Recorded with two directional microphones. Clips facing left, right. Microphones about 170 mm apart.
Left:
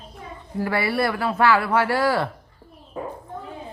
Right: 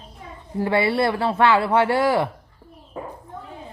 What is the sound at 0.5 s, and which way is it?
Speech, 25° right (ahead or behind).